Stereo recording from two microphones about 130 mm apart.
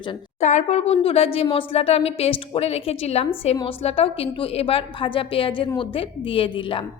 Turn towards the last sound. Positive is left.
turn(degrees=40)  # may be behind; listen again after turning